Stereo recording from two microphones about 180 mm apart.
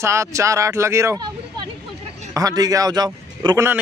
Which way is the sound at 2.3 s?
20° right (ahead or behind).